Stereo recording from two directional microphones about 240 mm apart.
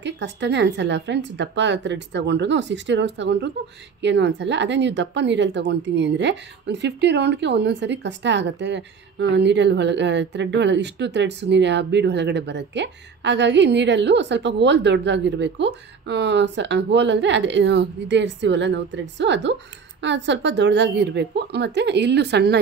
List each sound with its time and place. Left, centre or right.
0.0 s speech: right